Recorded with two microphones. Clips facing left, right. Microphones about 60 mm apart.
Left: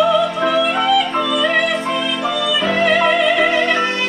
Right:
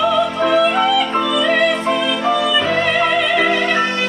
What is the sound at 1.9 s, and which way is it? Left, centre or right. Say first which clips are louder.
Music: right 3 dB; right.